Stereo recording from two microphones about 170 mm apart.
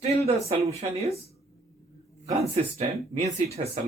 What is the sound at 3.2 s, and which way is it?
Speech, 40° right (ahead or behind).